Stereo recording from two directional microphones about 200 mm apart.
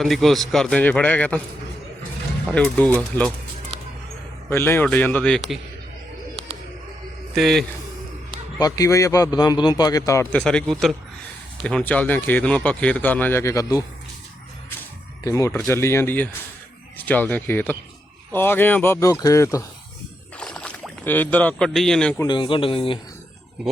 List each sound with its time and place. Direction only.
0.0 s a man's voice: centre (ahead or behind)
2.5 s a man's voice: 5° left (ahead or behind)
4.4 s a man's voice: 10° left (ahead or behind)
7.3 s a man's voice: centre (ahead or behind)
8.5 s a man's voice: 20° left (ahead or behind)
15.2 s a man's voice: 15° left (ahead or behind)
20.4 s speech: 5° left (ahead or behind)
22.2 s a man's voice: 25° left (ahead or behind)